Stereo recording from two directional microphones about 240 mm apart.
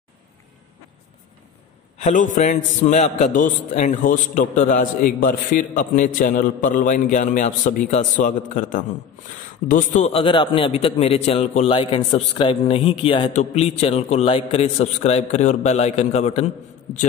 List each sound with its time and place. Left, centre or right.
2.0 s a man's voice: left